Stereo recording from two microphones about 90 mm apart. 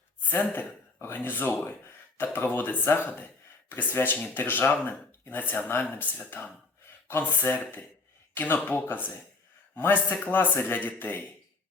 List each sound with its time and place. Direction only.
0.2 s speech: 20° left (ahead or behind)